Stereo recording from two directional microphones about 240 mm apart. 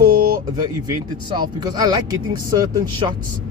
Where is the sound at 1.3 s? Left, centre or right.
Centre.